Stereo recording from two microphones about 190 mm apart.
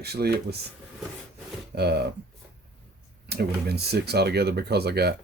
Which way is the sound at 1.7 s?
55° right (ahead or behind).